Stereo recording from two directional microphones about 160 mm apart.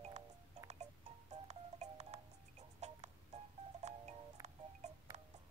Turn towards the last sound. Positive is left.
turn(degrees=-45)  # may be behind; listen again after turning